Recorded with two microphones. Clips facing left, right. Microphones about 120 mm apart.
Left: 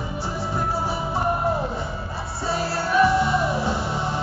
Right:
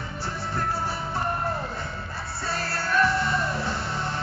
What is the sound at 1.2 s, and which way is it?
Music, 10° left (ahead or behind).